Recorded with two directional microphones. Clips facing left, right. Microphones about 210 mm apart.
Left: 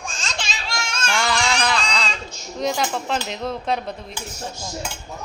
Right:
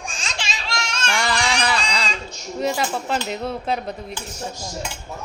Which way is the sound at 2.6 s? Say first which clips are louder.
Even; 5° right (ahead or behind).